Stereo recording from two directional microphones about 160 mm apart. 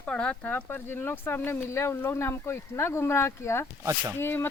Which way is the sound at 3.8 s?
15° right (ahead or behind).